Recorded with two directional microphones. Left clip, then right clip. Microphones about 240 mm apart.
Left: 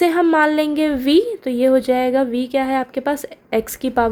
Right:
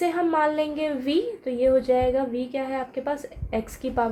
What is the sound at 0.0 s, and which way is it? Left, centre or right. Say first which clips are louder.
A woman's voice: left 8 dB; left.